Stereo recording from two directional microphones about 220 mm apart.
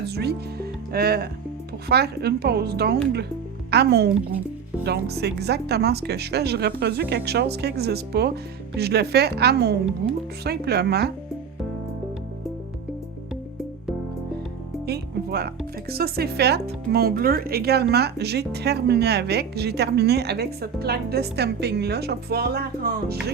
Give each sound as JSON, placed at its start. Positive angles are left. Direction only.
{"t": 0.0, "sound": "speech", "side_deg": -50}
{"t": 14.8, "sound": "speech", "side_deg": -45}